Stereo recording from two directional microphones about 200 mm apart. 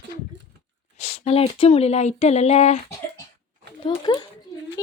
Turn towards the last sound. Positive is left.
turn(degrees=20)  # may be behind; listen again after turning